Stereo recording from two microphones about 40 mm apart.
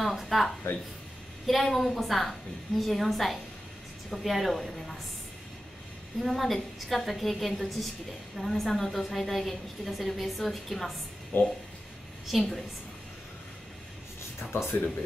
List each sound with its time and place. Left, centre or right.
0.0 s a woman's voice: centre
6.1 s a woman's voice: centre
11.3 s speech: left
12.3 s a woman's voice: centre
14.5 s speech: left